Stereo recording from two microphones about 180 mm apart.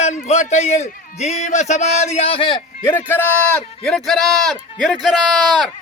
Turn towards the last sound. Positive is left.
turn(degrees=0)  # may be behind; listen again after turning